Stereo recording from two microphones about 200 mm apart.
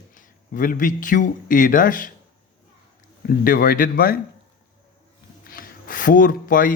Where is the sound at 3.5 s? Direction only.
45° left (ahead or behind).